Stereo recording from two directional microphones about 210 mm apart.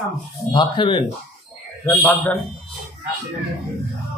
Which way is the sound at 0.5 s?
25° left (ahead or behind).